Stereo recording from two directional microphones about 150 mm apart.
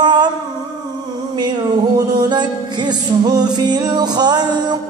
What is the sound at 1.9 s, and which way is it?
Music, 25° right (ahead or behind).